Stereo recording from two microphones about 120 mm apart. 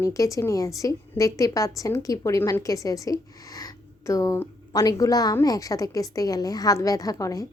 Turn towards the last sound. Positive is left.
turn(degrees=30)  # may be behind; listen again after turning